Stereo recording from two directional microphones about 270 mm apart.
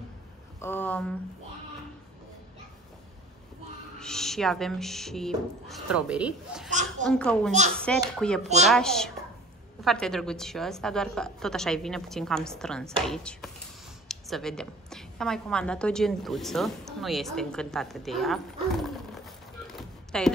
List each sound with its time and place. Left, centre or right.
0.6 s speech: centre
4.0 s a woman's voice: centre
6.7 s a child's voice: right
7.1 s a woman's voice: centre
19.7 s a sound: centre